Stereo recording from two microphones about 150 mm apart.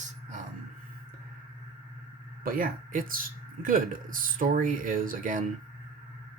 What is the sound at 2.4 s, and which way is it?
Speech, 70° right (ahead or behind).